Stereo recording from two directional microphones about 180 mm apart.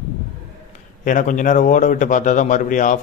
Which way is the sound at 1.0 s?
45° left (ahead or behind).